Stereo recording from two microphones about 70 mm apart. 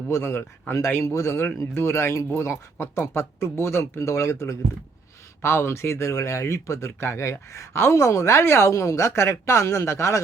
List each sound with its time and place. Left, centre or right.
0.1 s a man's voice: left